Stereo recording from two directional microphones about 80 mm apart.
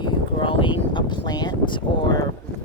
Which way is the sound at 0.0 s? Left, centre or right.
Left.